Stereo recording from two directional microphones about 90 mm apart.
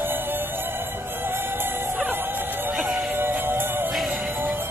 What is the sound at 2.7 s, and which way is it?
Music, 10° right (ahead or behind).